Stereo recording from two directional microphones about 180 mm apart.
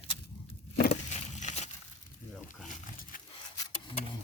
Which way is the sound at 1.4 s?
40° left (ahead or behind).